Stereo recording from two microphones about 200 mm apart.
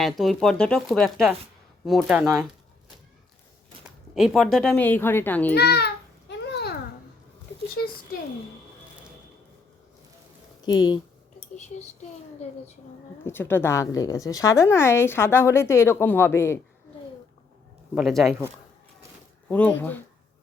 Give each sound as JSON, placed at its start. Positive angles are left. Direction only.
{"t": 0.0, "sound": "speech", "side_deg": 0}
{"t": 3.8, "sound": "speech", "side_deg": -5}
{"t": 5.5, "sound": "babbling", "side_deg": 55}
{"t": 10.6, "sound": "a sound", "side_deg": 20}
{"t": 13.2, "sound": "a woman's voice", "side_deg": 10}
{"t": 17.9, "sound": "speech", "side_deg": 0}
{"t": 19.5, "sound": "a woman's voice", "side_deg": 5}